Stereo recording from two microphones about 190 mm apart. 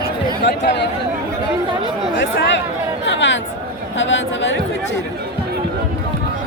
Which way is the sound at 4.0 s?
80° left.